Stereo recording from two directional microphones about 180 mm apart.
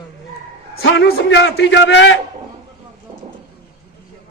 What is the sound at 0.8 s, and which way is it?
A man's voice, 80° left.